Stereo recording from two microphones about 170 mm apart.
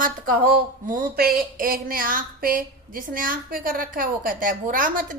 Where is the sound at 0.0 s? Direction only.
55° right (ahead or behind).